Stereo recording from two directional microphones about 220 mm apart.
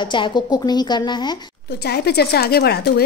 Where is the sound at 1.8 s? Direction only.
50° left (ahead or behind).